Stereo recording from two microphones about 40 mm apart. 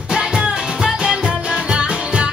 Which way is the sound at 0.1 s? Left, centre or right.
Right.